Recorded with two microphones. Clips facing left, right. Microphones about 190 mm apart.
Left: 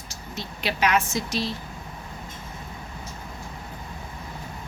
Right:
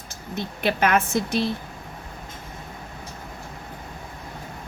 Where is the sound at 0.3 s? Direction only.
55° right (ahead or behind).